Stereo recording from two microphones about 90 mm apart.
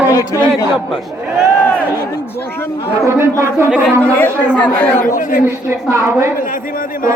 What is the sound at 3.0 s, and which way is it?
Speech, 25° right (ahead or behind).